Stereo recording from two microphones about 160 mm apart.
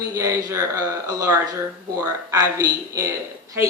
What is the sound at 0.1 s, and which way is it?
Speech, 20° right (ahead or behind).